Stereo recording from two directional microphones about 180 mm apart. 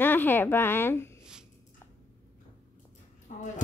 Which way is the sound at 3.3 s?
45° left (ahead or behind).